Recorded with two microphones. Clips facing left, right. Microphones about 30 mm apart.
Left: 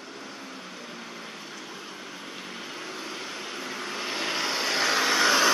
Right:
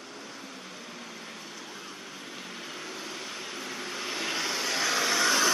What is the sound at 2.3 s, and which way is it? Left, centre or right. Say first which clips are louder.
Vehicle: left 1 dB; centre.